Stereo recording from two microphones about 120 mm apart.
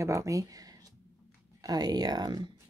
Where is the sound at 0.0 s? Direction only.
25° right (ahead or behind).